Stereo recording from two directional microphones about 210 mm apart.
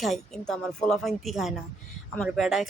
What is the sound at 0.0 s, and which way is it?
A woman's voice, centre (ahead or behind).